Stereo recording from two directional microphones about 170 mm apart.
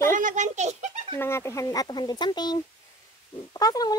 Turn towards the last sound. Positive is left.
turn(degrees=20)  # may be behind; listen again after turning